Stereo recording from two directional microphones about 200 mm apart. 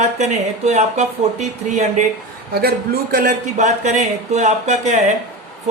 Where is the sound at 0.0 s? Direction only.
35° right (ahead or behind).